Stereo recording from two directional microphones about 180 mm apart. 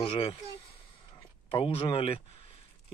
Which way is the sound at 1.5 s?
30° left (ahead or behind).